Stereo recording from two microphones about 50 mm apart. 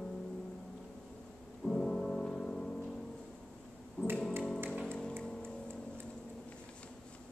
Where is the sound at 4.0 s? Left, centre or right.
Right.